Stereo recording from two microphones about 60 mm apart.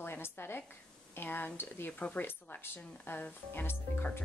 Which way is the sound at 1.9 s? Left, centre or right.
Centre.